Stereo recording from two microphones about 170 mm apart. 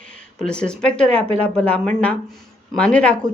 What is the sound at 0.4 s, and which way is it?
Speech, 5° left (ahead or behind).